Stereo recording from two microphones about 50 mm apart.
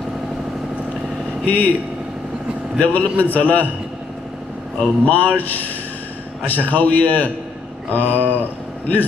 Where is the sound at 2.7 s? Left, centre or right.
Left.